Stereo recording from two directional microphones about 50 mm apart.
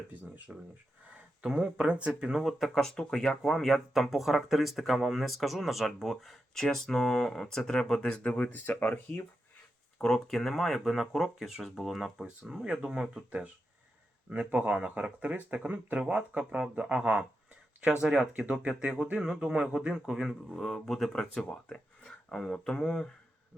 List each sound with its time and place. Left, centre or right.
0.1 s speech: right
1.5 s speech: centre
2.3 s speech: centre
2.7 s speech: centre
8.2 s speech: left
10.0 s speech: centre
12.5 s speech: centre
14.3 s speech: right; by 20.2 s centre
20.2 s speech: centre